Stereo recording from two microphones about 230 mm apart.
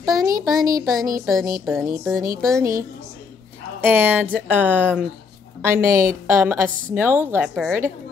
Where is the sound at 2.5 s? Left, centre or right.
Centre.